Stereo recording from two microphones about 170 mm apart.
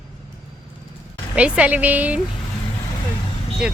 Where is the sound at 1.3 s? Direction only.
5° right (ahead or behind).